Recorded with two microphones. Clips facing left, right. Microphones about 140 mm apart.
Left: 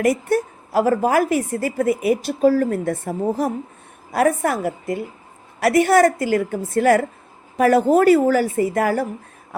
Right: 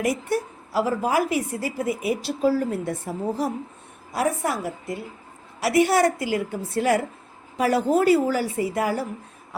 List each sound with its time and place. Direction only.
0.0 s a woman's voice: 50° left (ahead or behind)
5.5 s a woman's voice: 55° left (ahead or behind)